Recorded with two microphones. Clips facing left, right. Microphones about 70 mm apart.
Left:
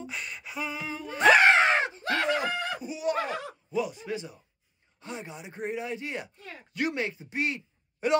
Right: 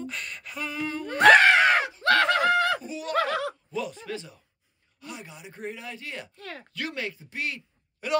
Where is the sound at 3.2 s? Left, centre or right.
Right.